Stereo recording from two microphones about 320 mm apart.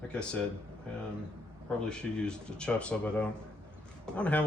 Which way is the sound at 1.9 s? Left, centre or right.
Centre.